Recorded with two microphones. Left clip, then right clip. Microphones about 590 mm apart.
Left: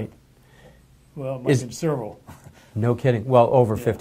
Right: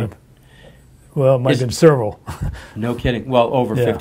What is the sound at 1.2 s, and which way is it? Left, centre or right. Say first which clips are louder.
Speech: right 9 dB; right.